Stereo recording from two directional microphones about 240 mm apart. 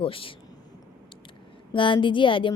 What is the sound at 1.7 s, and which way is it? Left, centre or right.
Speech, left.